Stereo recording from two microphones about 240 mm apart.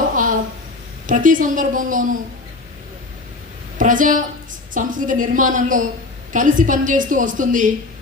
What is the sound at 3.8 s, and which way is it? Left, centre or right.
A woman's voice, right.